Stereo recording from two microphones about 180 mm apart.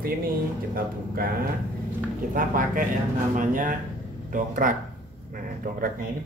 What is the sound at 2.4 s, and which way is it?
Speech, 50° right (ahead or behind).